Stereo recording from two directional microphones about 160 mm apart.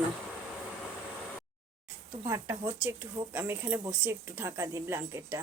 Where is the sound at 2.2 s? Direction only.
20° right (ahead or behind).